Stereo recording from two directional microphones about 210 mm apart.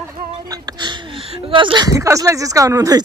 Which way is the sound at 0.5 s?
20° right (ahead or behind).